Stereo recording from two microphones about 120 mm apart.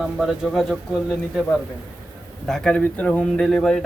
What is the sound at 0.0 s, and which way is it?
Speech, centre (ahead or behind).